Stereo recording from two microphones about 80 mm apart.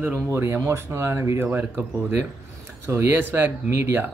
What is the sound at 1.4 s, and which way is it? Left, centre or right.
Speech, right.